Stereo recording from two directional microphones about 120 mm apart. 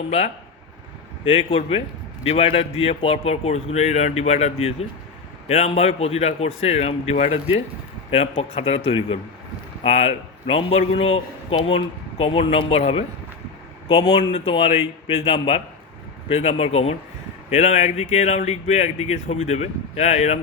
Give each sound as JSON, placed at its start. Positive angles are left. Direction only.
{"t": 1.2, "sound": "a man's voice", "side_deg": 50}
{"t": 17.5, "sound": "speech", "side_deg": 70}